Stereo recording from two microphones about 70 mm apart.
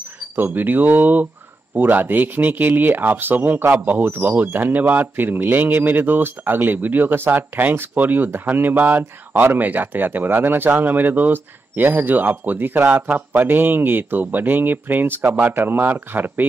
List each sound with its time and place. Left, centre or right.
0.4 s speech: right